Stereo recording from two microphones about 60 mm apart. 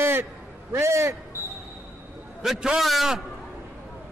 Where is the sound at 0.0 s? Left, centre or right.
Right.